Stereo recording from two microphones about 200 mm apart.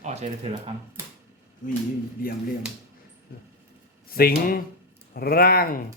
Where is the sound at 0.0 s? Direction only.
35° right (ahead or behind).